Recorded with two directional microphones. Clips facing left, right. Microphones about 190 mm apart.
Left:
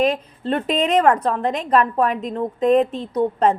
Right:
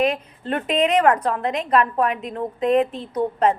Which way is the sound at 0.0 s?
35° left (ahead or behind).